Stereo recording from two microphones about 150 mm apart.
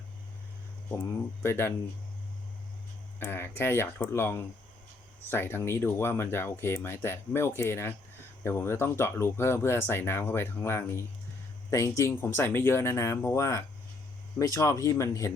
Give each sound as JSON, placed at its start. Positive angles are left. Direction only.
{"t": 0.9, "sound": "speech", "side_deg": 15}
{"t": 3.2, "sound": "speech", "side_deg": 15}